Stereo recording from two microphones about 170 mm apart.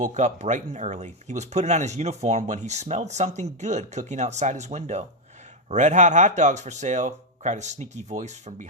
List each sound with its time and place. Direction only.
0.0 s speech: 45° right (ahead or behind)